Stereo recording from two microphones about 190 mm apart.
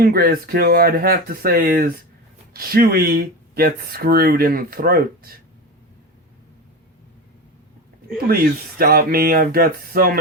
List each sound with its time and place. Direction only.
0.0 s speech: 50° right (ahead or behind)
8.8 s speech: 50° right (ahead or behind)